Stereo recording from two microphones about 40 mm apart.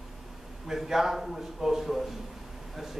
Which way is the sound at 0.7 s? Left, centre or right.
Centre.